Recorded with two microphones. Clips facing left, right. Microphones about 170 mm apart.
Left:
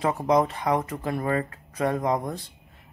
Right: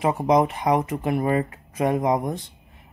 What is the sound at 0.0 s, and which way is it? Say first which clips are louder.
Speech: right 3 dB; 20° right (ahead or behind).